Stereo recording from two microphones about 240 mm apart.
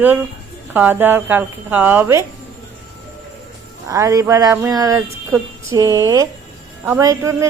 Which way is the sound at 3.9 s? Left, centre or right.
Centre.